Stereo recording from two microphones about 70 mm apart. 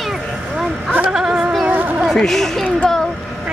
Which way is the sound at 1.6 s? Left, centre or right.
Right.